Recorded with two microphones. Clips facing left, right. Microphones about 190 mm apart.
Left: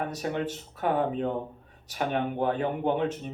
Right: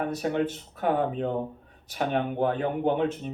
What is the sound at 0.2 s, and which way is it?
Speech, 55° right (ahead or behind).